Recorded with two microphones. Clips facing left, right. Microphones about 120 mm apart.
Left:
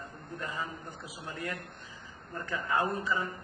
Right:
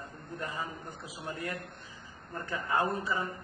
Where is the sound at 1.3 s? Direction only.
30° right (ahead or behind).